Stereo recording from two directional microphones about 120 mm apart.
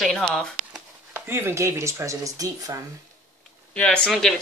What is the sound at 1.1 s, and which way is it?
Speech, 20° right (ahead or behind).